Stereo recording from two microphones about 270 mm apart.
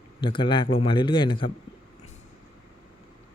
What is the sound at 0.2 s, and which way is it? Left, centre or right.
A man's voice, centre.